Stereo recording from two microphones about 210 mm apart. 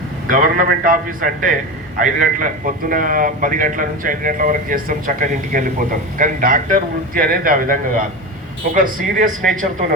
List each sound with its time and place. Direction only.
0.3 s a man's voice: 40° right (ahead or behind)